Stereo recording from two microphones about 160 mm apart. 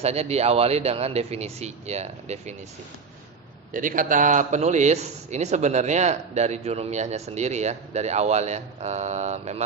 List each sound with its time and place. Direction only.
0.0 s a man's voice: 40° right (ahead or behind)
3.7 s a man's voice: 55° right (ahead or behind)